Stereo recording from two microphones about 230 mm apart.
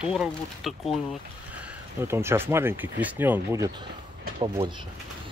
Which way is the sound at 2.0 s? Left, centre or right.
Centre.